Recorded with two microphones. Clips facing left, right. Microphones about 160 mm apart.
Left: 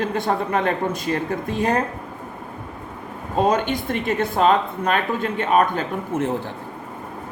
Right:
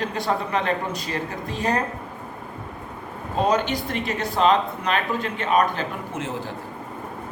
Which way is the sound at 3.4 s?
50° left (ahead or behind).